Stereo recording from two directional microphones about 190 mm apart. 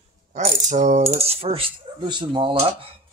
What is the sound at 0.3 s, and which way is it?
Coin, 40° right (ahead or behind).